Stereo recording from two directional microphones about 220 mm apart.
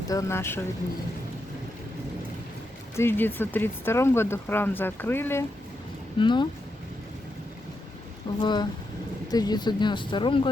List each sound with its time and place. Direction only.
0.1 s speech: 15° left (ahead or behind)
2.9 s speech: 10° left (ahead or behind)
6.1 s speech: 20° left (ahead or behind)
8.4 s speech: 20° left (ahead or behind)